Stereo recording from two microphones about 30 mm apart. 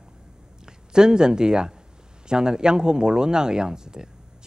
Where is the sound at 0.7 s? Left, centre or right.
Right.